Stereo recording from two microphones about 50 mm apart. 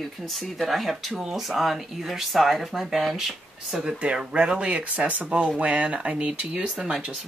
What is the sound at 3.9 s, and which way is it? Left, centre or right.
Speech, centre.